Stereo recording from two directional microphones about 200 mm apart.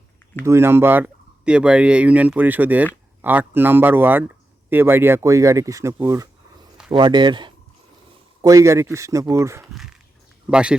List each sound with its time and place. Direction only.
0.4 s speech: 10° right (ahead or behind)